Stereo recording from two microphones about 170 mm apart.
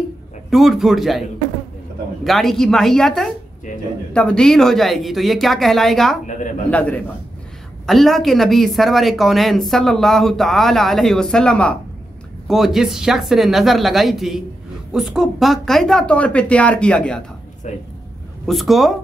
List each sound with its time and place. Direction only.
0.5 s a woman's voice: centre (ahead or behind)
2.2 s a woman's voice: centre (ahead or behind)
17.6 s speech: 45° left (ahead or behind)
18.5 s a woman's voice: centre (ahead or behind)